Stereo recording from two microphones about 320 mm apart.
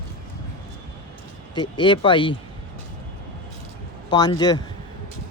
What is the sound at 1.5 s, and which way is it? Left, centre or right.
Speech, centre.